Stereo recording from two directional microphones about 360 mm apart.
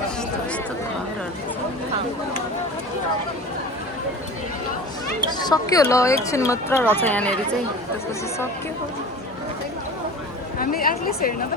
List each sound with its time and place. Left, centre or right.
5.4 s speech: centre
10.6 s a woman's voice: left